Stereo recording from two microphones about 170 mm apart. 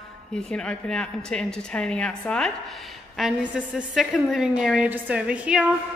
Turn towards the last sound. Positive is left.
turn(degrees=-5)  # may be behind; listen again after turning